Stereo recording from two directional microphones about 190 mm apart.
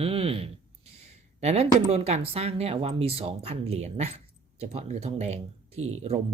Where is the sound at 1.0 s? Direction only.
35° right (ahead or behind).